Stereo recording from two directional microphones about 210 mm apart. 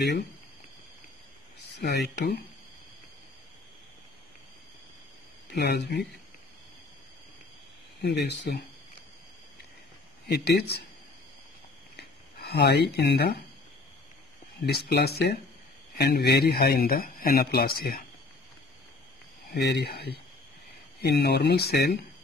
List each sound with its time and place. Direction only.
1.7 s speech: 50° left (ahead or behind)
5.5 s speech: 50° left (ahead or behind)
8.0 s speech: 55° left (ahead or behind)
10.2 s speech: 50° left (ahead or behind)
12.0 s speech: 50° left (ahead or behind)
14.7 s speech: 50° left (ahead or behind)
19.5 s speech: 50° left (ahead or behind)